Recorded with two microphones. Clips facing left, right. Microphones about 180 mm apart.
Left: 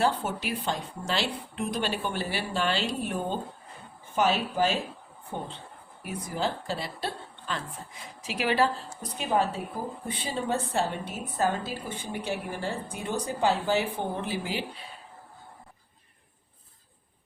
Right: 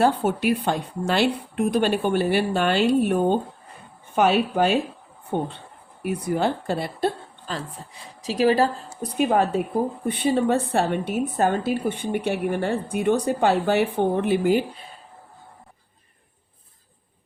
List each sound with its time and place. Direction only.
0.0 s a woman's voice: 55° right (ahead or behind)
7.5 s a woman's voice: 40° right (ahead or behind)
9.1 s a woman's voice: 60° right (ahead or behind)